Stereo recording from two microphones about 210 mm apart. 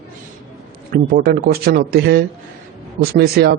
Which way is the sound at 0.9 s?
45° right (ahead or behind).